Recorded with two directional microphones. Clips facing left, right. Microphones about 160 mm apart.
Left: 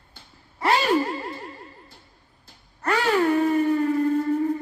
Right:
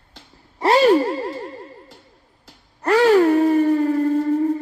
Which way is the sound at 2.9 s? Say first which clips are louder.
Right 7 dB; 35° right (ahead or behind).